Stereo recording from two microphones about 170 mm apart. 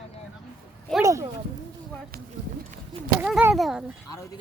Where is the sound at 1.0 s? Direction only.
15° right (ahead or behind).